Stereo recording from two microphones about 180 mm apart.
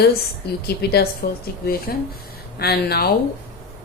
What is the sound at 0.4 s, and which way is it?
Speech, 65° left (ahead or behind).